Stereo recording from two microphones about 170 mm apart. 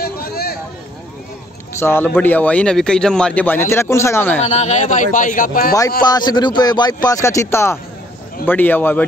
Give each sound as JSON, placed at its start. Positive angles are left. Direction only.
{"t": 0.0, "sound": "a sound", "side_deg": 65}
{"t": 1.7, "sound": "a man's voice", "side_deg": 15}
{"t": 4.4, "sound": "a man's voice", "side_deg": 40}
{"t": 6.0, "sound": "a man's voice", "side_deg": 25}